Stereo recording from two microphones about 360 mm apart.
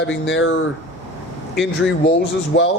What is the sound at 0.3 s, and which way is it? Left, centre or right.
Speech, left.